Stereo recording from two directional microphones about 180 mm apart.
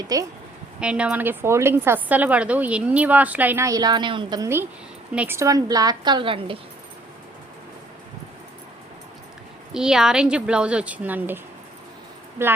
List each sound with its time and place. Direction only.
0.1 s a woman's voice: 20° right (ahead or behind)
0.8 s a woman's voice: 5° right (ahead or behind); by 6.6 s 30° right (ahead or behind)
9.7 s speech: 5° right (ahead or behind)
12.4 s a woman's voice: 15° right (ahead or behind)